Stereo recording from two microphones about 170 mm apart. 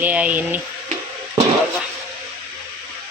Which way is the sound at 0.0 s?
10° right (ahead or behind).